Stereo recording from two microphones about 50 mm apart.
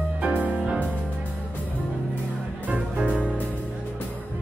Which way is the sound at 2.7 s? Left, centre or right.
Right.